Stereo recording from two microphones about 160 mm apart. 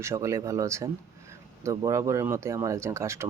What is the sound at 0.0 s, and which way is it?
Speech, 20° right (ahead or behind).